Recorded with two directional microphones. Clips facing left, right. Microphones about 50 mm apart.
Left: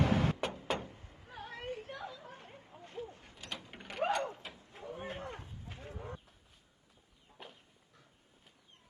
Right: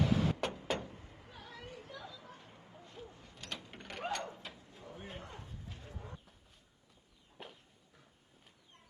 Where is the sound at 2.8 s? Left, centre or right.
Left.